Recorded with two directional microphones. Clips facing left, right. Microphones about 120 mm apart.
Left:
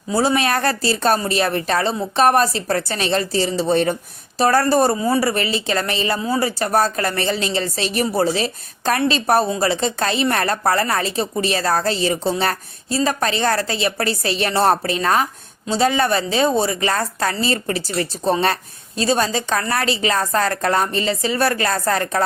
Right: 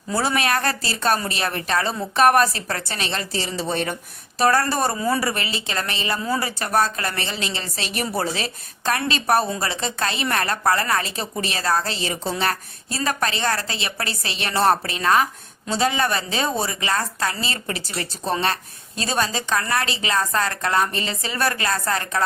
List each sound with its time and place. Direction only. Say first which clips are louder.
0.1 s a woman's voice: left 4 dB; 25° left (ahead or behind)